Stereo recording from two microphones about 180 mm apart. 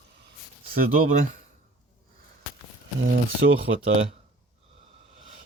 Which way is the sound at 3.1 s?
90° right.